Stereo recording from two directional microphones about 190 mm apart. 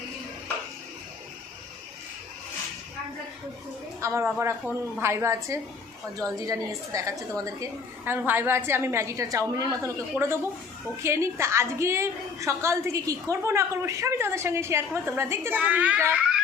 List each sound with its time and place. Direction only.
4.0 s a woman's voice: 15° right (ahead or behind)